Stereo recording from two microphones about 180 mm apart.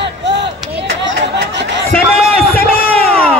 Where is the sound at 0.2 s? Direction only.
75° right (ahead or behind).